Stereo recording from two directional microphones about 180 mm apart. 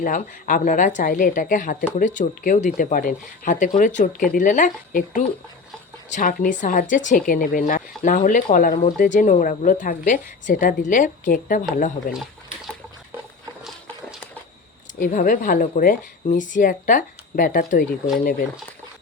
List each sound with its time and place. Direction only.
0.0 s speech: 50° left (ahead or behind)
12.1 s a sound: centre (ahead or behind)
14.9 s speech: 45° left (ahead or behind)